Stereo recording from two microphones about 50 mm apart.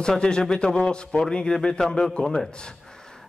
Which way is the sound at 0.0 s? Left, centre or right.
Centre.